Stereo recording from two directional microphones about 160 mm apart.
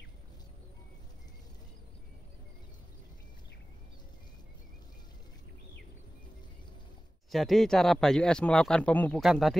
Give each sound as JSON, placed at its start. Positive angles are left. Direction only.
{"t": 7.2, "sound": "a man's voice", "side_deg": 0}